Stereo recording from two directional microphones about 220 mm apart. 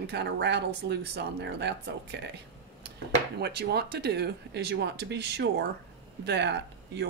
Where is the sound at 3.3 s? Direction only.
50° right (ahead or behind).